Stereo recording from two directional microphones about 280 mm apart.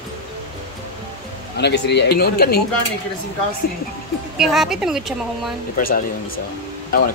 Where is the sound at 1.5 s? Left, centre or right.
Left.